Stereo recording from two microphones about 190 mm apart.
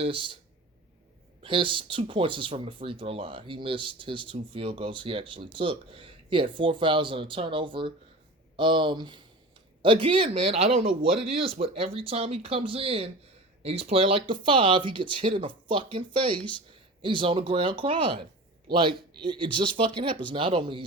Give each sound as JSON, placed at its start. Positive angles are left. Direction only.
{"t": 0.0, "sound": "speech", "side_deg": -25}
{"t": 1.4, "sound": "speech", "side_deg": -25}